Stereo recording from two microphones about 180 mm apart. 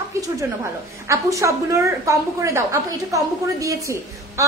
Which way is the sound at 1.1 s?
15° right (ahead or behind).